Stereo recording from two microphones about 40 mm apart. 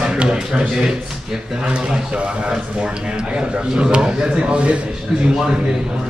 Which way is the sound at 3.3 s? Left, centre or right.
Right.